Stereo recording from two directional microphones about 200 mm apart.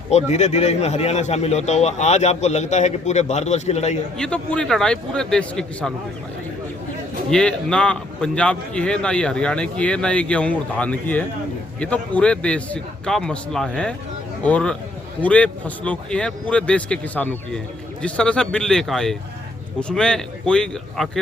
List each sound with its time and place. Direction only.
0.1 s speech: 35° left (ahead or behind)
4.2 s a man's voice: 5° left (ahead or behind)
7.3 s a man's voice: 5° left (ahead or behind)